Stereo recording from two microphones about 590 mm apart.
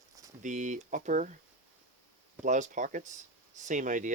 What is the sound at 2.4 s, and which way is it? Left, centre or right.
Speech, centre.